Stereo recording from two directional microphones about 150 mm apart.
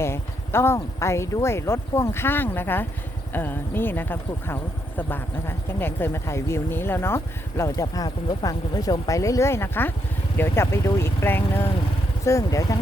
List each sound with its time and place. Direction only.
0.0 s speech: 15° left (ahead or behind)